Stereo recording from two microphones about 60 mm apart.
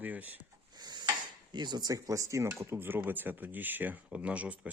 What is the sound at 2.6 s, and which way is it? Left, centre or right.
Speech, right.